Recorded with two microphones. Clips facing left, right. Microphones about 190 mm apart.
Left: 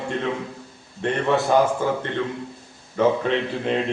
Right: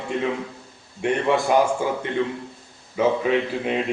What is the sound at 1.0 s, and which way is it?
A man's voice, 10° right (ahead or behind).